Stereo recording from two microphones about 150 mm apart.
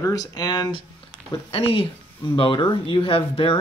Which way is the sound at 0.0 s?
25° left (ahead or behind).